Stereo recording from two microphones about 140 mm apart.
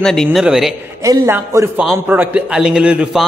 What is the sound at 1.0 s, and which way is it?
Speech, 20° right (ahead or behind).